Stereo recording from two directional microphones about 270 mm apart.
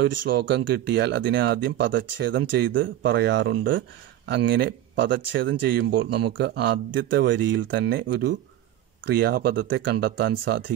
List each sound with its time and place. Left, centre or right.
0.1 s speech: right
0.4 s speech: right